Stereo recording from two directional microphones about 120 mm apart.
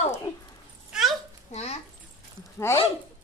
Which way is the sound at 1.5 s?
60° left (ahead or behind).